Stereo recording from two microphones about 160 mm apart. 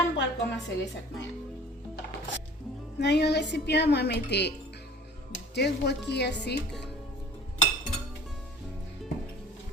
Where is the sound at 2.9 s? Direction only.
90° left.